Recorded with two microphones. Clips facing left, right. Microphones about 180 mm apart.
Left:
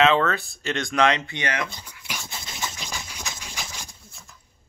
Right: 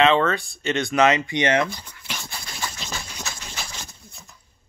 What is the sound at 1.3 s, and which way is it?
Speech, 25° right (ahead or behind).